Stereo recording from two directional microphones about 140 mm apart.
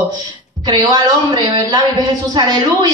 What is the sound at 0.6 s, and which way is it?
A woman's voice, 30° right (ahead or behind).